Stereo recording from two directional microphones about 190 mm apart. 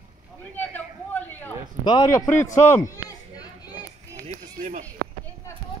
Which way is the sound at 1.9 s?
20° left (ahead or behind).